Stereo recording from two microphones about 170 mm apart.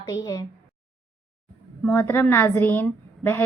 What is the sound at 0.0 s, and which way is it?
Speech, 20° left (ahead or behind).